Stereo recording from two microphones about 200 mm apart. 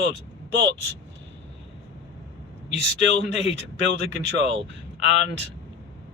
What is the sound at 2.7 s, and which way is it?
Speech, 30° left (ahead or behind).